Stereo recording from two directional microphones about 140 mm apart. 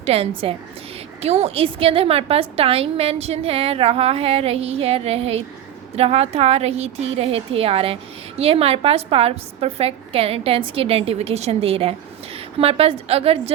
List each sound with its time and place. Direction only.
0.0 s a woman's voice: 45° right (ahead or behind)